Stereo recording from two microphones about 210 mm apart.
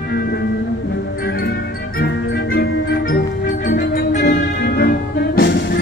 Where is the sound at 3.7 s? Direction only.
50° left (ahead or behind).